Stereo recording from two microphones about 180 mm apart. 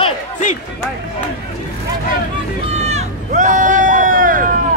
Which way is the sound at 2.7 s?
35° right (ahead or behind).